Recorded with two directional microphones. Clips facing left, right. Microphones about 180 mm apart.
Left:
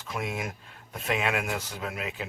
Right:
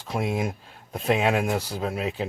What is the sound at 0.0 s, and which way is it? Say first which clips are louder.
Speech: right 6 dB; 35° right (ahead or behind).